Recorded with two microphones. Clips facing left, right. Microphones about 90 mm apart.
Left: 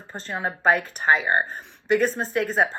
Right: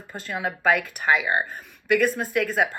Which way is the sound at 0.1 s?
35° left (ahead or behind).